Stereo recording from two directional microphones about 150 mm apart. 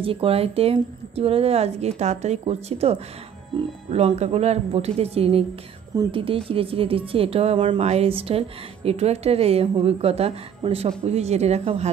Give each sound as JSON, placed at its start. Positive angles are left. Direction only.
{"t": 0.0, "sound": "a woman's voice", "side_deg": -40}
{"t": 7.8, "sound": "a woman's voice", "side_deg": -45}